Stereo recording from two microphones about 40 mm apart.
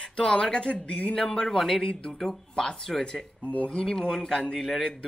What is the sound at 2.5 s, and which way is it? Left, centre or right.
Speech, left.